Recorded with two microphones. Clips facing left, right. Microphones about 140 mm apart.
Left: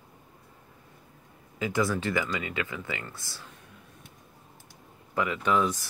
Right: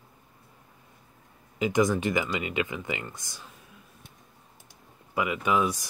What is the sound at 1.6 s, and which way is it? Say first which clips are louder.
Speech: right 4 dB; 15° right (ahead or behind).